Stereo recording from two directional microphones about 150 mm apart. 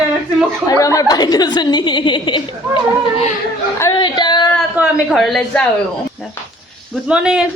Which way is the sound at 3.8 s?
25° left (ahead or behind).